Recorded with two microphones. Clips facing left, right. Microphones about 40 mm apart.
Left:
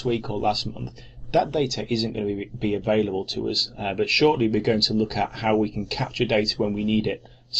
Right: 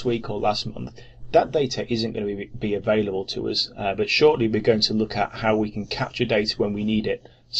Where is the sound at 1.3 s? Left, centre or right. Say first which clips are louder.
Right 3 dB; centre.